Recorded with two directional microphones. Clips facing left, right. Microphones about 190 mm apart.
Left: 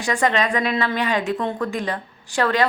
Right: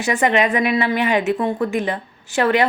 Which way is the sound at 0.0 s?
20° right (ahead or behind).